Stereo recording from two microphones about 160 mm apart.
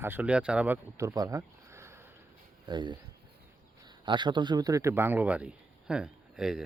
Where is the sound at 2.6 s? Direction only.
30° right (ahead or behind).